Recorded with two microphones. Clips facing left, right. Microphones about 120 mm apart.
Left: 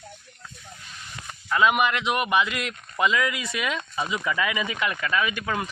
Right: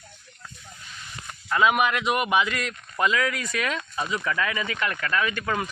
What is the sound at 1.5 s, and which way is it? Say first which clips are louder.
A man's voice: even; centre (ahead or behind).